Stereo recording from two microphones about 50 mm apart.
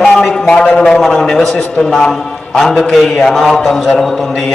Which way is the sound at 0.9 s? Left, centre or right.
Centre.